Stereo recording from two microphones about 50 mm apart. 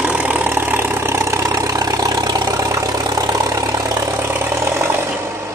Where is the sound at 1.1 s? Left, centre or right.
Right.